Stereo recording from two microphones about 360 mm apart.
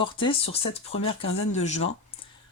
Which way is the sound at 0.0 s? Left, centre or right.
Centre.